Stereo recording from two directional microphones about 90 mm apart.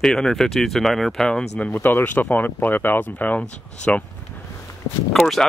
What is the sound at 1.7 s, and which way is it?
Speech, 25° left (ahead or behind).